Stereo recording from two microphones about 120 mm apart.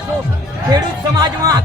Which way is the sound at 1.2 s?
35° right (ahead or behind).